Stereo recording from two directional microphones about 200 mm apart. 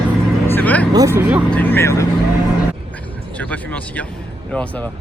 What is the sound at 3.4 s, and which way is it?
Speech, 5° left (ahead or behind).